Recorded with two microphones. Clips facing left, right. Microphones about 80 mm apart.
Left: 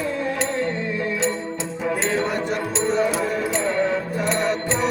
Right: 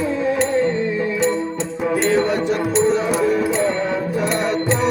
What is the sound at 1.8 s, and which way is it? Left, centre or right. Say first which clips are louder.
Music: right 5 dB; centre.